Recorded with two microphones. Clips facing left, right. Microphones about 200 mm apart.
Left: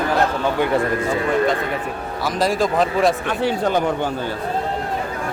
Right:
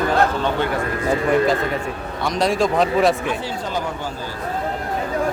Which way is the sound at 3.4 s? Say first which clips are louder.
Left 7 dB; 60° left (ahead or behind).